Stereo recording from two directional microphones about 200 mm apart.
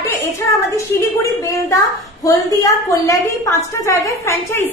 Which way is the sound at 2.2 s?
15° left (ahead or behind).